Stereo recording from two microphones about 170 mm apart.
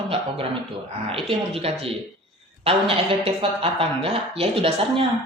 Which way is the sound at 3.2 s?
35° right (ahead or behind).